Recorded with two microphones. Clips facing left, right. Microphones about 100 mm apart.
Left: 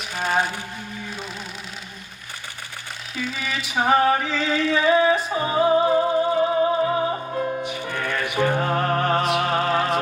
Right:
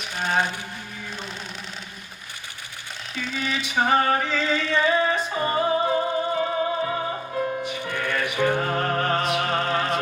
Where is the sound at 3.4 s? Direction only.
Centre (ahead or behind).